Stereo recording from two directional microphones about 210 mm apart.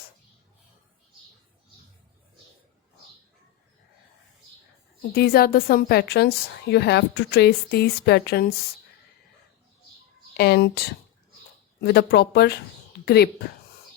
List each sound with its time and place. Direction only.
5.1 s a woman's voice: 45° left (ahead or behind)
10.3 s a woman's voice: 50° left (ahead or behind)